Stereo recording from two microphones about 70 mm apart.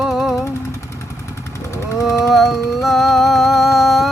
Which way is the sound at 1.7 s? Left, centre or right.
Left.